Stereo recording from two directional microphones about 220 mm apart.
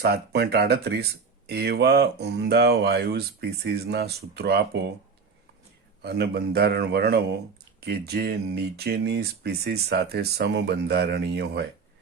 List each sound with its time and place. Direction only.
0.0 s speech: 50° right (ahead or behind)
6.0 s speech: 50° right (ahead or behind)